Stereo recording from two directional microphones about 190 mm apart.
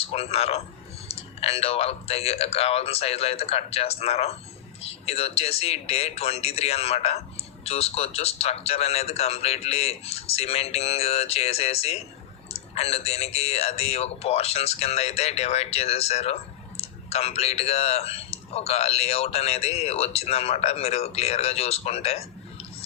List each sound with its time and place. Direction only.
0.1 s speech: 30° left (ahead or behind)